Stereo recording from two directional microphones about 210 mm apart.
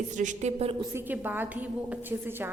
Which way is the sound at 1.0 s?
10° right (ahead or behind).